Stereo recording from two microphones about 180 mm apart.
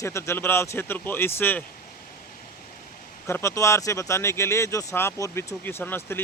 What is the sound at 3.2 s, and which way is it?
Speech, 15° left (ahead or behind).